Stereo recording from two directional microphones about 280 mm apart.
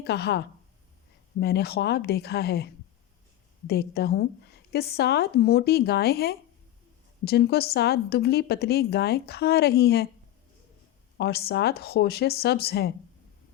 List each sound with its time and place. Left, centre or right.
0.0 s a woman's voice: left
3.7 s a woman's voice: left
11.2 s a woman's voice: left